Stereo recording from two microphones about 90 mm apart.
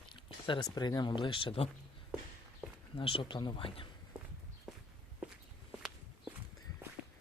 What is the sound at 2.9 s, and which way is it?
Speech, 80° left.